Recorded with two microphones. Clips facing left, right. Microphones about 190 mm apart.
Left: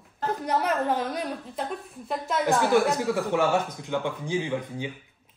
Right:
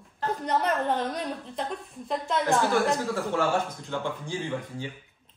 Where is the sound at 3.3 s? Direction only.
15° left (ahead or behind).